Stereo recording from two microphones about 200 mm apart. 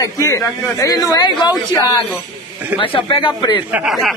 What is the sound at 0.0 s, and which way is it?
Speech, 15° left (ahead or behind).